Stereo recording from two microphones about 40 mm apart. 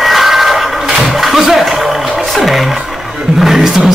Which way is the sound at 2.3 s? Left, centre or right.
Centre.